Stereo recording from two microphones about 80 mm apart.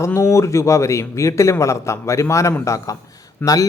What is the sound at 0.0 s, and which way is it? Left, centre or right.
A man's voice, left.